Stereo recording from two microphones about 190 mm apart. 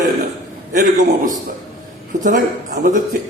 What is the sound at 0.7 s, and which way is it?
A man's voice, 45° right (ahead or behind).